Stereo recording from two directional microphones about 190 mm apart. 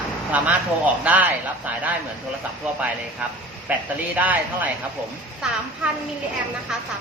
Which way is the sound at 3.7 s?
10° right (ahead or behind).